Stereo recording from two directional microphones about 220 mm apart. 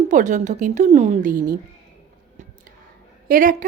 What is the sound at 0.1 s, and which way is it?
A woman's voice, 35° right (ahead or behind).